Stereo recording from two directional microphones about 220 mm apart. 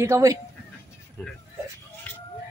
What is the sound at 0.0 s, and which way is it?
Speech, 15° right (ahead or behind).